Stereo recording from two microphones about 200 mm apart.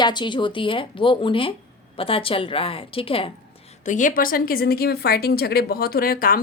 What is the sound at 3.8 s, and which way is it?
A woman's voice, 40° left (ahead or behind).